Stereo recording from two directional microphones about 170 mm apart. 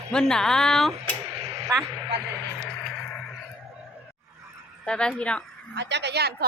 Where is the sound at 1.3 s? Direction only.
35° right (ahead or behind).